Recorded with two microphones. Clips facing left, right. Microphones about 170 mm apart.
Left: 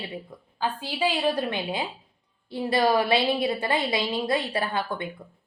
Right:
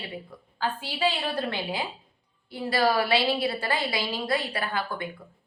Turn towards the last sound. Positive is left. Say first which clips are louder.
# left 2 dB
turn(degrees=25)  # may be behind; listen again after turning